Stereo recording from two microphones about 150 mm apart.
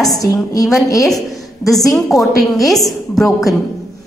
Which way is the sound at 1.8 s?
25° left (ahead or behind).